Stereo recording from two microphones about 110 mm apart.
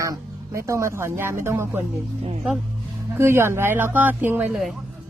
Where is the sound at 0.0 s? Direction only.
30° right (ahead or behind).